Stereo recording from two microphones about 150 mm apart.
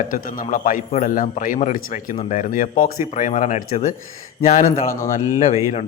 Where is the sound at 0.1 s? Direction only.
65° left (ahead or behind).